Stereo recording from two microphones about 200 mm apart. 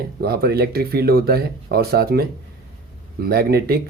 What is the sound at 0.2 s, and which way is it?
Speech, 50° right (ahead or behind).